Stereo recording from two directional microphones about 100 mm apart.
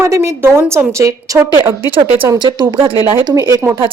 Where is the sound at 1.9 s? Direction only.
60° right (ahead or behind).